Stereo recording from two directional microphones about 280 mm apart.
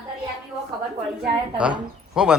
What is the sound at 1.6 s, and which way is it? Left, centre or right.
Speech, centre.